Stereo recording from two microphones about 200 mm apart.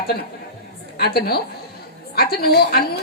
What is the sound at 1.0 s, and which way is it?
A woman's voice, 55° left (ahead or behind).